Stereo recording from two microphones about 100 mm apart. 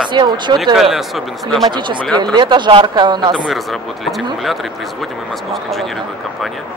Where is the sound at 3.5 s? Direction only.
Centre (ahead or behind).